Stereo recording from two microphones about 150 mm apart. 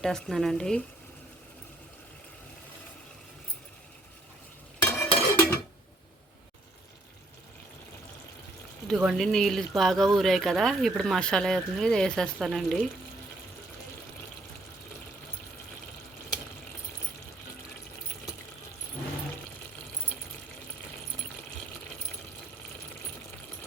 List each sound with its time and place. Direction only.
0.0 s speech: 5° left (ahead or behind)
4.8 s dishes: 15° left (ahead or behind)
8.9 s speech: centre (ahead or behind)